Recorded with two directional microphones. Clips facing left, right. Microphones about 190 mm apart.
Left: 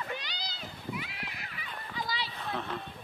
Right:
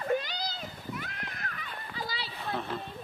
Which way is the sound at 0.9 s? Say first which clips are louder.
Left 3 dB; 5° left (ahead or behind).